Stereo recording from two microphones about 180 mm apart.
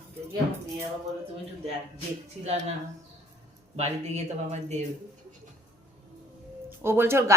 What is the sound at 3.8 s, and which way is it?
Speech, 40° right (ahead or behind).